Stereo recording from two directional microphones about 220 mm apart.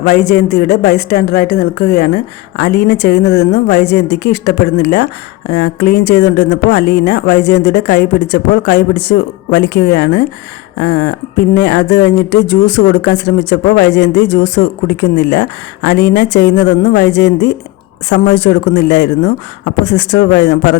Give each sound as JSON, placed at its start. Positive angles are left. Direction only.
{"t": 0.0, "sound": "speech", "side_deg": 45}